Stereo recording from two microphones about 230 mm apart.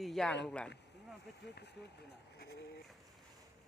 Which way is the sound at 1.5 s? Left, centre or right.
Left.